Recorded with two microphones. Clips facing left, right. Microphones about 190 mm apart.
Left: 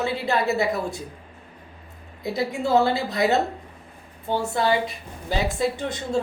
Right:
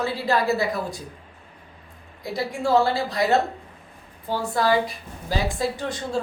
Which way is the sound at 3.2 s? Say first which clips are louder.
Even; 20° left (ahead or behind).